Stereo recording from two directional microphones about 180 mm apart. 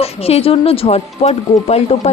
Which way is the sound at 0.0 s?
35° left (ahead or behind).